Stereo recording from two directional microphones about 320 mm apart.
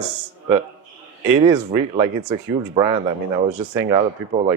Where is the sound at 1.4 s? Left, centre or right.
Centre.